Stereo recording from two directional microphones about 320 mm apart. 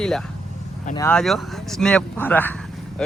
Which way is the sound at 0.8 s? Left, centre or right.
Centre.